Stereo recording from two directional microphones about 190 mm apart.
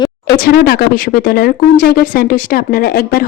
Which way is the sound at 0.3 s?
50° left (ahead or behind).